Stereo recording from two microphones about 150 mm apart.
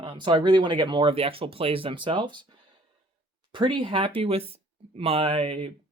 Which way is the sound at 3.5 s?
35° right (ahead or behind).